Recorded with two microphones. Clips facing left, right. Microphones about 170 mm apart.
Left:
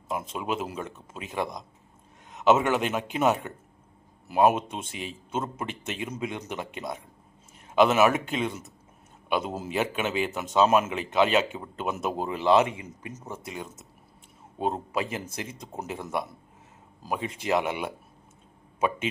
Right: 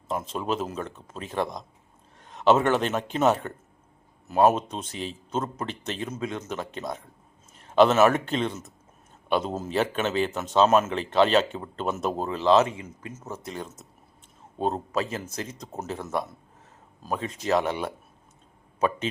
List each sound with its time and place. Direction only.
0.1 s a man's voice: 10° left (ahead or behind)